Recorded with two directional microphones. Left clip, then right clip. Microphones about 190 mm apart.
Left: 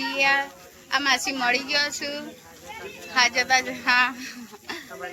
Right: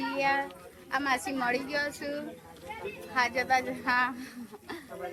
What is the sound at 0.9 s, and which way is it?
Speech, 15° left (ahead or behind).